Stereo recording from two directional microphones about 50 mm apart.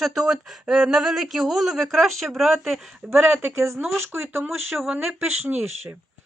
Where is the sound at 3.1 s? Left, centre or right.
Right.